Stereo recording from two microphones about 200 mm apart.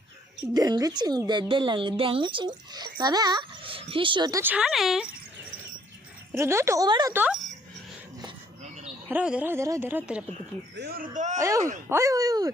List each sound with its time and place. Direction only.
0.5 s a woman's voice: 20° right (ahead or behind); by 5.0 s centre (ahead or behind)
6.3 s speech: 15° right (ahead or behind)
9.0 s speech: 5° right (ahead or behind)
10.8 s speech: 50° right (ahead or behind)
11.3 s speech: 15° right (ahead or behind)